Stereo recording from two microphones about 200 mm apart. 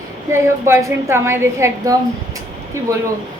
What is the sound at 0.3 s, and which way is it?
A woman's voice, 15° right (ahead or behind).